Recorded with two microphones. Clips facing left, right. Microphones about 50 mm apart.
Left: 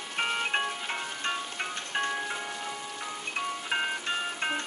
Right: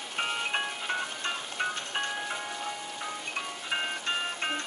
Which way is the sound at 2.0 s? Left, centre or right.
Centre.